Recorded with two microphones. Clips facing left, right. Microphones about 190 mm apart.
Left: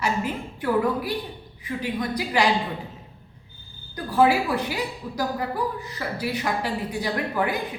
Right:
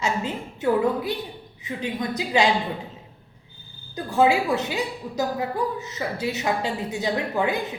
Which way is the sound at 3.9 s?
25° right (ahead or behind).